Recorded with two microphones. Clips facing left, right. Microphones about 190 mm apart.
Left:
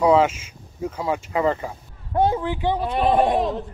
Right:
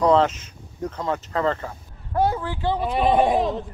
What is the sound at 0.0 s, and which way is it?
Speech, 10° left (ahead or behind).